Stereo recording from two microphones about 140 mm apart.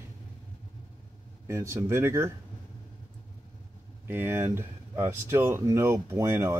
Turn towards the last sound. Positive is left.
turn(degrees=-20)  # may be behind; listen again after turning